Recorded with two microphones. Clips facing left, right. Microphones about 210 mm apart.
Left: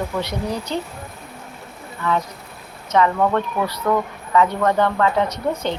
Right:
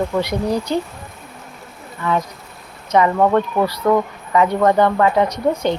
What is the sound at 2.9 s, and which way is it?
Speech, 15° right (ahead or behind).